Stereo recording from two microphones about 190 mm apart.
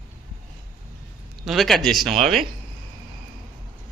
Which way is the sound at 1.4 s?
Centre (ahead or behind).